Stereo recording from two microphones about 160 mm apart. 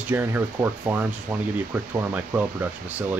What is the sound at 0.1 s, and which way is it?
Speech, 15° right (ahead or behind).